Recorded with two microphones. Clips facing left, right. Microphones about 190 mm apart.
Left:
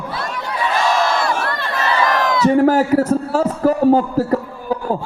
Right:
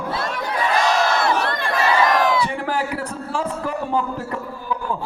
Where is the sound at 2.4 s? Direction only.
40° left (ahead or behind).